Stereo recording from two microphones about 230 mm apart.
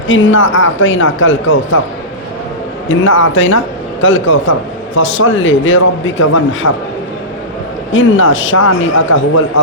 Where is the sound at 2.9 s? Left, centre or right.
Left.